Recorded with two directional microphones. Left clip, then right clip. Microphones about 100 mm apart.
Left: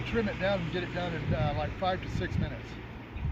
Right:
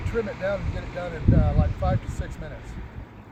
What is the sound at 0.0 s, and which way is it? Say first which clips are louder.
Speech: right 3 dB; 15° right (ahead or behind).